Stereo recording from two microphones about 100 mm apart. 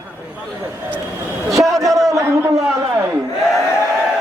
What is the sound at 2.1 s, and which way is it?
Speech, 30° right (ahead or behind).